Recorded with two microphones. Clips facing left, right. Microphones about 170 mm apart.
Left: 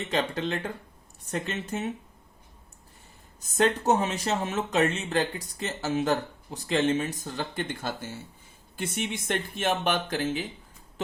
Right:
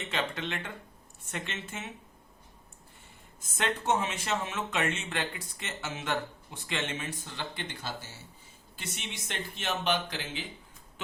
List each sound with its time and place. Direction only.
0.1 s speech: 35° left (ahead or behind)
3.5 s speech: 40° left (ahead or behind)